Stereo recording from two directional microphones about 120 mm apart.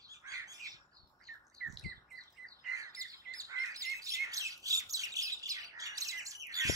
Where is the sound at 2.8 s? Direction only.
30° right (ahead or behind).